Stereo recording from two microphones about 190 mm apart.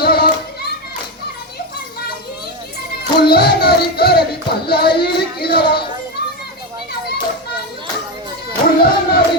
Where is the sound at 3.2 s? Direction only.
55° left (ahead or behind).